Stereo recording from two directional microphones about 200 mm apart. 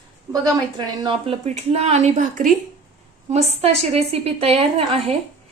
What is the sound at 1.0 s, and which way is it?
Speech, 30° right (ahead or behind).